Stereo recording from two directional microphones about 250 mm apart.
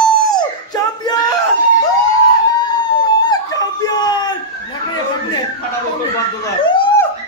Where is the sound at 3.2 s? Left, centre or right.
Centre.